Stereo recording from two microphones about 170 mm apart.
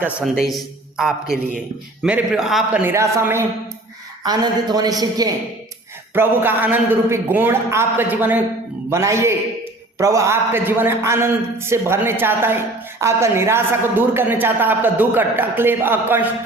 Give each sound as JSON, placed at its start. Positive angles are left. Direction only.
{"t": 0.0, "sound": "a man's voice", "side_deg": -5}
{"t": 2.8, "sound": "a man's voice", "side_deg": -15}